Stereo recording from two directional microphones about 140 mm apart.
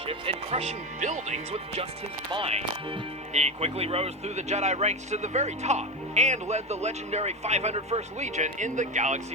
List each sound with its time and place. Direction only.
0.1 s speech: 45° right (ahead or behind)
0.9 s speech: 60° right (ahead or behind)